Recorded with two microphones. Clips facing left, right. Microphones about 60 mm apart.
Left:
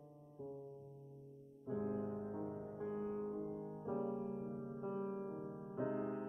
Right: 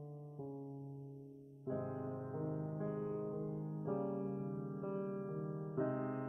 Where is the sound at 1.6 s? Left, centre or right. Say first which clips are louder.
Left 1 dB; centre.